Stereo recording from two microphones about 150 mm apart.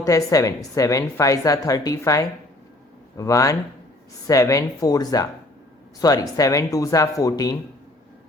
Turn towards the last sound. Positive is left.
turn(degrees=25)  # may be behind; listen again after turning